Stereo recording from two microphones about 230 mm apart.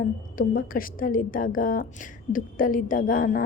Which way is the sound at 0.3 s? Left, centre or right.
Left.